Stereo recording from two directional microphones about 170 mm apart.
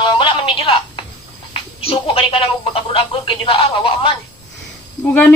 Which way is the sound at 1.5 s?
35° left (ahead or behind).